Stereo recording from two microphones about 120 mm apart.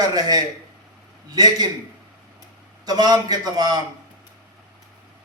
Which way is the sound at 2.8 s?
35° right (ahead or behind).